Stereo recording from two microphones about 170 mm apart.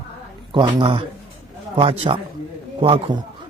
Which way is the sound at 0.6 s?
30° right (ahead or behind).